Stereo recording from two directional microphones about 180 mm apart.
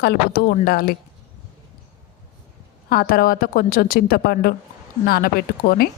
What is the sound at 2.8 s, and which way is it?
A woman's voice, 55° left (ahead or behind).